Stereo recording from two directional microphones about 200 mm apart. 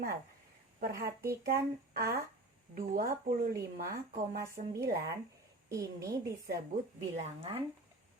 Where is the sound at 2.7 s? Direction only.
45° right (ahead or behind).